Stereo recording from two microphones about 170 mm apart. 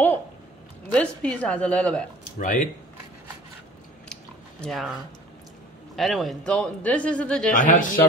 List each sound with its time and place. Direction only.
0.9 s a woman's voice: 5° left (ahead or behind)
2.3 s a man's voice: 50° left (ahead or behind)
4.1 s chewing: 5° left (ahead or behind)
5.9 s speech: centre (ahead or behind)
7.5 s a man's voice: 50° left (ahead or behind)